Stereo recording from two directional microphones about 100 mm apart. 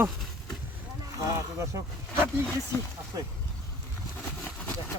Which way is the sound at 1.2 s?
30° right (ahead or behind).